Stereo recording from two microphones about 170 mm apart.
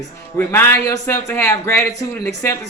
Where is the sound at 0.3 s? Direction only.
15° left (ahead or behind).